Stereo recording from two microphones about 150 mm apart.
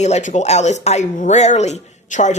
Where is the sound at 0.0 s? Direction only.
50° left (ahead or behind).